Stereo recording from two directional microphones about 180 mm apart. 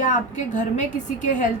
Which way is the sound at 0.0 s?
45° left (ahead or behind).